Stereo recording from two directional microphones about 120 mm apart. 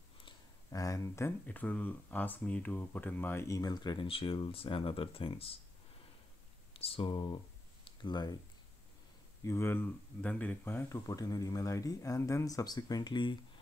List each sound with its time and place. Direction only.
0.7 s speech: 30° left (ahead or behind)
1.4 s speech: 15° left (ahead or behind); by 5.6 s 50° left (ahead or behind)
6.7 s speech: 50° left (ahead or behind)
7.8 s a sound: 40° left (ahead or behind)
9.4 s speech: 20° left (ahead or behind)
11.1 s speech: 30° left (ahead or behind)